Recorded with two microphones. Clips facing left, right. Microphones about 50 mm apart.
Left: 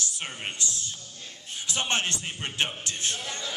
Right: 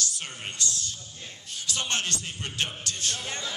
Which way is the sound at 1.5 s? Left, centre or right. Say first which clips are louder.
Left 2 dB; left.